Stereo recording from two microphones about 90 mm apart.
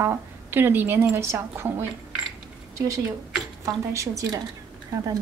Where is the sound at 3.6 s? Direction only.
35° right (ahead or behind).